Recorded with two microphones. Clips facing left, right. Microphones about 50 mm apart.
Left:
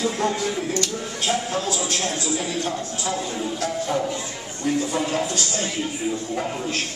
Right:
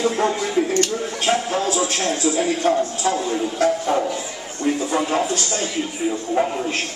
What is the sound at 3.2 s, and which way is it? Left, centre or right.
Speech, centre.